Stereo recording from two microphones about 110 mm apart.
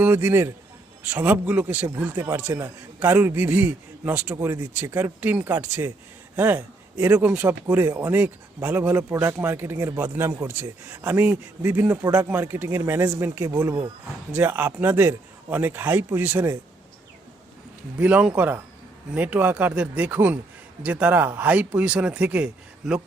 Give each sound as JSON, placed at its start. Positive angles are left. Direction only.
{"t": 0.0, "sound": "a man's voice", "side_deg": -20}
{"t": 18.0, "sound": "a man's voice", "side_deg": -10}